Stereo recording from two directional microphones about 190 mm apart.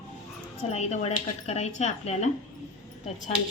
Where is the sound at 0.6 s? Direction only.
35° left (ahead or behind).